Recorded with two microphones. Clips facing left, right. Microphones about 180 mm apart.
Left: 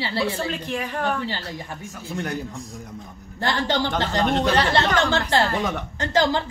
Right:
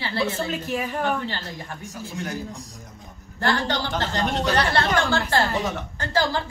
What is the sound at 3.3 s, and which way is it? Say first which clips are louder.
A woman's voice: left 1 dB; 15° left (ahead or behind).